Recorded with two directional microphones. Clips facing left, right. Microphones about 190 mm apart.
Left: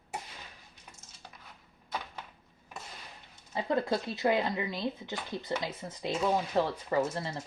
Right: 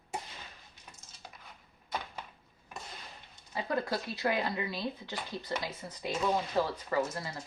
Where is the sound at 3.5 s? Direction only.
25° left (ahead or behind).